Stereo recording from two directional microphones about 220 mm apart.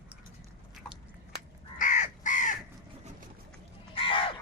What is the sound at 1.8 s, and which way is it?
Crow, 35° left (ahead or behind).